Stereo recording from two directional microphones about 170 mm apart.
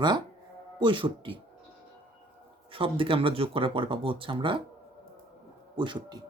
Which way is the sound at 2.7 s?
30° right (ahead or behind).